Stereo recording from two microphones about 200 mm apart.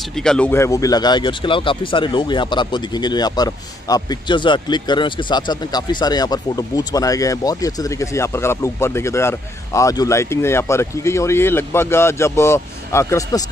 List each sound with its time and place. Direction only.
0.2 s speech: 5° left (ahead or behind)